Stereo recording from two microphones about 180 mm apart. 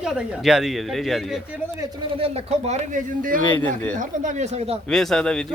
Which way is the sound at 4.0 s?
45° right (ahead or behind).